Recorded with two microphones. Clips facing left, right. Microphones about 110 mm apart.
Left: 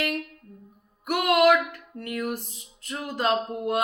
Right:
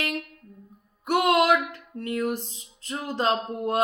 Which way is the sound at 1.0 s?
30° right (ahead or behind).